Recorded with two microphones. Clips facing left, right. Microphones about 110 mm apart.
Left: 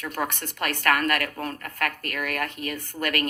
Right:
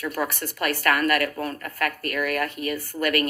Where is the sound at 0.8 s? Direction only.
45° left (ahead or behind).